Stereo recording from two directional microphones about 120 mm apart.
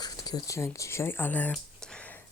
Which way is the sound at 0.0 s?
35° left (ahead or behind).